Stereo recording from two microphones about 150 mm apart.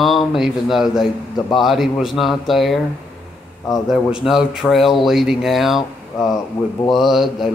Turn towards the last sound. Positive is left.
turn(degrees=0)  # may be behind; listen again after turning